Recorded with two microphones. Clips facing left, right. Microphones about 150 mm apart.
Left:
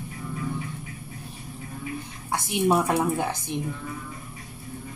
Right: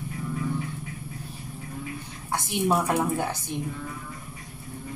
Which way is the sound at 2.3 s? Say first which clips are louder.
Left 2 dB; 10° left (ahead or behind).